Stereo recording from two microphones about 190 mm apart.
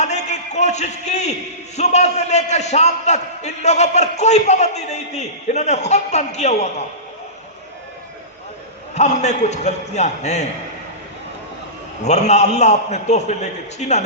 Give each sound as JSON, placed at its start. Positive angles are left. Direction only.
{"t": 0.0, "sound": "a man's voice", "side_deg": 35}
{"t": 9.0, "sound": "a man's voice", "side_deg": 35}
{"t": 12.0, "sound": "a man's voice", "side_deg": 35}